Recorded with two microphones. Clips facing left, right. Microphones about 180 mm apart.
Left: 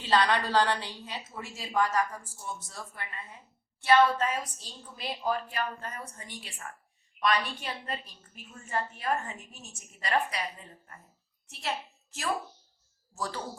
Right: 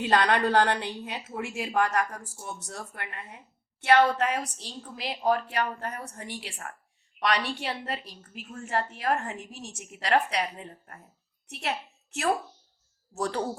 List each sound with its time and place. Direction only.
0.0 s a woman's voice: 55° right (ahead or behind); by 8.4 s 85° right
8.4 s a child's voice: 65° right (ahead or behind)
13.1 s speech: 70° right (ahead or behind)